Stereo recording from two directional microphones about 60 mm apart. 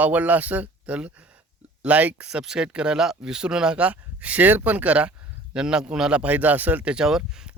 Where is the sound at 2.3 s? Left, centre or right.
Centre.